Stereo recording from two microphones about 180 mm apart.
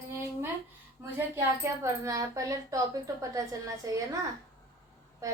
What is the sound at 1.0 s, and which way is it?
A woman's voice, 15° right (ahead or behind).